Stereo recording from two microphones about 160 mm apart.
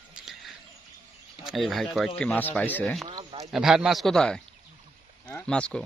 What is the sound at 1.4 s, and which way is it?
Speech, centre (ahead or behind).